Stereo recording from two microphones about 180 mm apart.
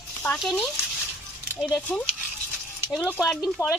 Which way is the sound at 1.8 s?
5° left (ahead or behind).